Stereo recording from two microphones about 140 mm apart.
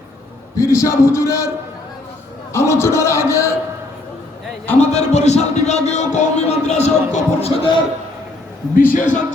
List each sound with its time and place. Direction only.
0.5 s a man's voice: 20° left (ahead or behind)
2.5 s a man's voice: 20° left (ahead or behind)
4.8 s a man's voice: 55° left (ahead or behind)
8.7 s a man's voice: 75° left (ahead or behind)